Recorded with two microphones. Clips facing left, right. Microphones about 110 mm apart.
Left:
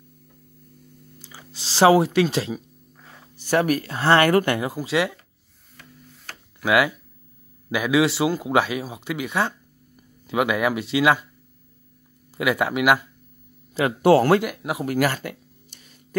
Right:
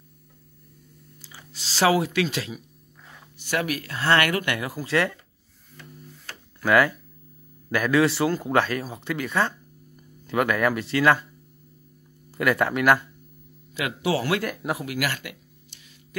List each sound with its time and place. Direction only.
1.2 s speech: 25° left (ahead or behind)
4.6 s speech: 20° left (ahead or behind)
6.6 s speech: 10° left (ahead or behind)
12.4 s speech: 10° left (ahead or behind)
14.0 s speech: 50° left (ahead or behind)
14.4 s speech: 5° left (ahead or behind)
14.9 s a sound: 40° left (ahead or behind)